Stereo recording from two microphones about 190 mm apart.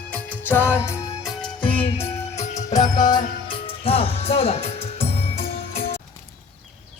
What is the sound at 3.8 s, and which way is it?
Music, 30° left (ahead or behind).